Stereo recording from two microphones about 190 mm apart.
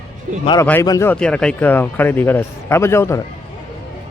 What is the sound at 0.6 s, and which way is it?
Speech, 10° left (ahead or behind).